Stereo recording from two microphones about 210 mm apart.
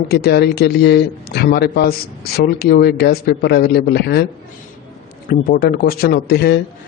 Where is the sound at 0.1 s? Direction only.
50° left (ahead or behind).